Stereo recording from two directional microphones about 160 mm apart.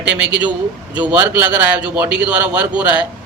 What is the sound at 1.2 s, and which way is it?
A man's voice, 10° right (ahead or behind).